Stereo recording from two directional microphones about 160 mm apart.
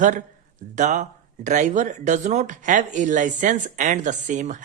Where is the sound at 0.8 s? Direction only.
50° right (ahead or behind).